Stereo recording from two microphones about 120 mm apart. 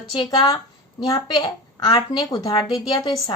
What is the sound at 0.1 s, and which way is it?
A woman's voice, 40° left (ahead or behind).